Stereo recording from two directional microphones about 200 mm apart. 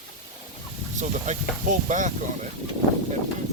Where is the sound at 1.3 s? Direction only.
40° right (ahead or behind).